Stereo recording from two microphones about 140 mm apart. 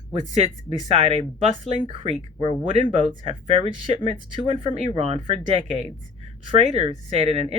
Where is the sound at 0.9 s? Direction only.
40° right (ahead or behind).